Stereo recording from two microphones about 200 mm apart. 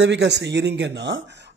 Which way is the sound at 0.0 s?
60° right (ahead or behind).